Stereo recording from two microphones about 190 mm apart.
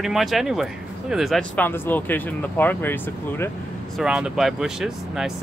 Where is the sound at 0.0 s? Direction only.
Centre (ahead or behind).